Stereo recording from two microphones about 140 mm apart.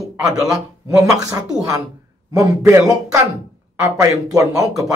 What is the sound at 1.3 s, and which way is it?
Speech, 25° right (ahead or behind).